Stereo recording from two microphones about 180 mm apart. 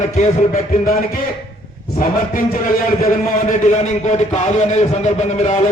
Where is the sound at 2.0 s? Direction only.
50° left (ahead or behind).